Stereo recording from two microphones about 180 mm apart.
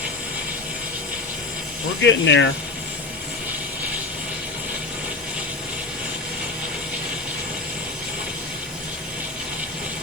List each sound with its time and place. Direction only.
2.0 s speech: 80° left